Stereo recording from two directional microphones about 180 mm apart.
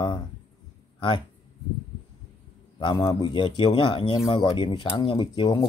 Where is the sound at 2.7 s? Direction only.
25° left (ahead or behind).